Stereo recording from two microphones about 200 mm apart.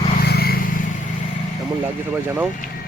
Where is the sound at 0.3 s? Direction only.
50° left (ahead or behind).